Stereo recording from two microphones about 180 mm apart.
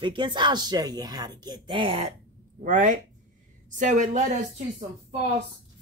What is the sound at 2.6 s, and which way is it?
A woman's voice, 45° right (ahead or behind).